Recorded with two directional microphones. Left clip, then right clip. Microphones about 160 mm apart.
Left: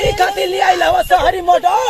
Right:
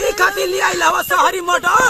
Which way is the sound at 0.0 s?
5° right (ahead or behind).